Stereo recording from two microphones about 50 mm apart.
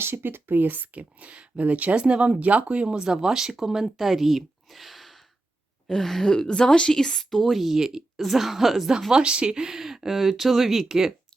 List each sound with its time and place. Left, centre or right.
0.0 s a woman's voice: right; by 11.1 s centre